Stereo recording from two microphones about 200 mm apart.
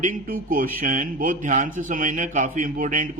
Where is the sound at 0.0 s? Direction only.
45° right (ahead or behind).